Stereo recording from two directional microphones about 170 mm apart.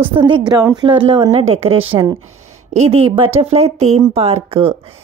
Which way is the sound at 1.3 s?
35° right (ahead or behind).